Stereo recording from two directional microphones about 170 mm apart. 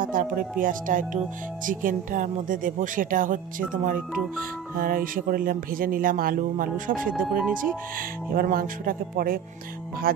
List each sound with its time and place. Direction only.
0.0 s speech: 55° right (ahead or behind)
7.1 s speech: 5° right (ahead or behind)
8.3 s speech: 60° right (ahead or behind)